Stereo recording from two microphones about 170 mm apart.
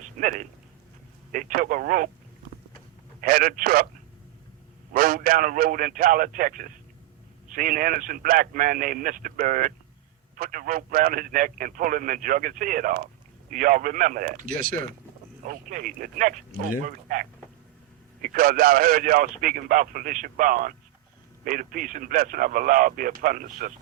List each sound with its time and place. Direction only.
0.2 s a man's voice: 50° right (ahead or behind)
3.2 s speech: 60° right (ahead or behind)
4.9 s a man's voice: 55° right (ahead or behind)